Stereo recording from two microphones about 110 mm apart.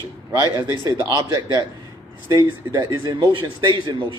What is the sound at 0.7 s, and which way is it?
Speech, 35° right (ahead or behind).